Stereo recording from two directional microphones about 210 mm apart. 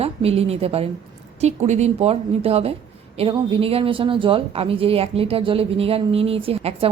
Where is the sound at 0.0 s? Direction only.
30° right (ahead or behind).